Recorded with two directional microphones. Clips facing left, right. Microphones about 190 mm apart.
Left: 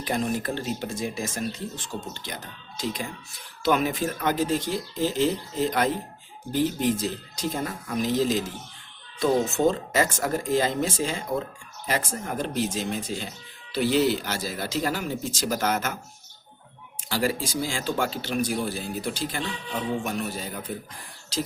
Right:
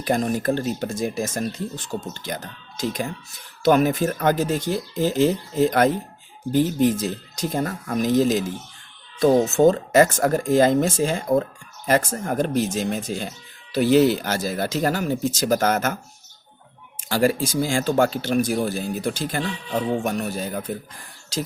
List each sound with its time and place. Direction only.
0.0 s speech: 45° right (ahead or behind)
6.5 s speech: 45° right (ahead or behind)
17.1 s speech: 50° right (ahead or behind)